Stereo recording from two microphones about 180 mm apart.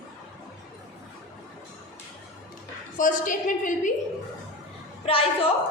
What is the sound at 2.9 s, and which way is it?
Speech, 45° left (ahead or behind).